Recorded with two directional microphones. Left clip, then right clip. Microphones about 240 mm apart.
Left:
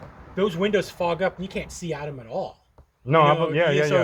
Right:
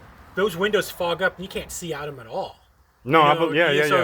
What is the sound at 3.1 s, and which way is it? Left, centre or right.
Speech, right.